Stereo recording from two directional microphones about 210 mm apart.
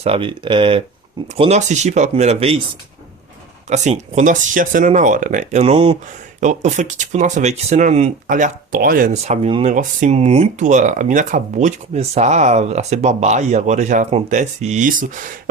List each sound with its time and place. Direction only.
0.0 s speech: 25° right (ahead or behind)
3.7 s speech: 35° right (ahead or behind)